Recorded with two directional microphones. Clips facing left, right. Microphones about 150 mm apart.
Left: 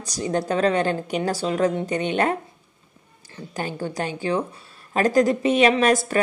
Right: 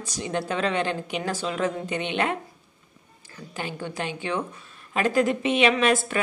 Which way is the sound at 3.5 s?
40° left (ahead or behind).